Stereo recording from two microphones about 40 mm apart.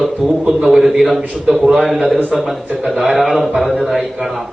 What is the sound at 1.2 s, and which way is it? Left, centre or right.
A man's voice, centre.